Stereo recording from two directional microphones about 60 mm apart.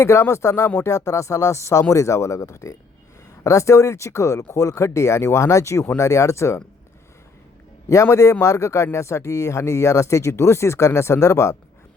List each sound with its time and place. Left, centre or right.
0.0 s speech: left
5.8 s speech: left
6.1 s speech: left
8.1 s speech: left